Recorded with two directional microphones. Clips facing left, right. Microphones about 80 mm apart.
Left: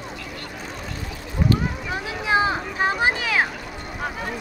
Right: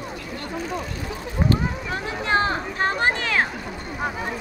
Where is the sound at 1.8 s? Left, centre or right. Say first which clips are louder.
Even; centre.